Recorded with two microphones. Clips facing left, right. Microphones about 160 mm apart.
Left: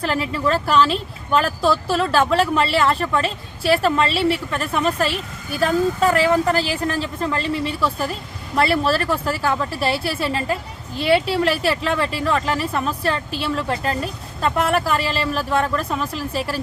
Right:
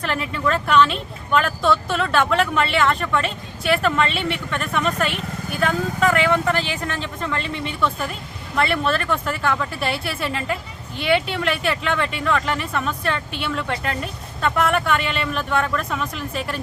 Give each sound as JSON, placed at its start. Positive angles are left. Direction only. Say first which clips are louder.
{"t": 0.0, "sound": "speech", "louder": "left 2 dB", "side_deg": 30}